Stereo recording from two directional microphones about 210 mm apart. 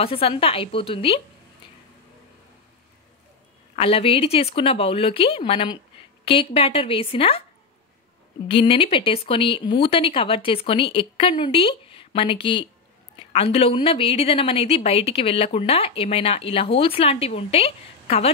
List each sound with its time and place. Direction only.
0.0 s a woman's voice: 25° left (ahead or behind)
3.7 s a woman's voice: 25° left (ahead or behind)
8.5 s a woman's voice: 25° left (ahead or behind)